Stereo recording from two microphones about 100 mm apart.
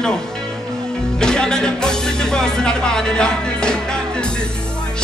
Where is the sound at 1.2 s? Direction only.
5° left (ahead or behind).